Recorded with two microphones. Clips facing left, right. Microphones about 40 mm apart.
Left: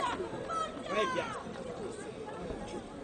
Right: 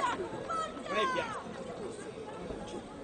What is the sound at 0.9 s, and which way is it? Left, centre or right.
Chatter, right.